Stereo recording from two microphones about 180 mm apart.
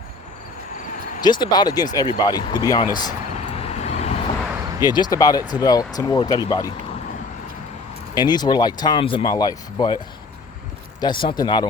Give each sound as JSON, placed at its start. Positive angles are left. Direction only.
{"t": 1.2, "sound": "speech", "side_deg": 25}
{"t": 3.3, "sound": "vehicle", "side_deg": 35}
{"t": 4.8, "sound": "speech", "side_deg": 25}
{"t": 8.1, "sound": "speech", "side_deg": 25}
{"t": 11.0, "sound": "speech", "side_deg": 25}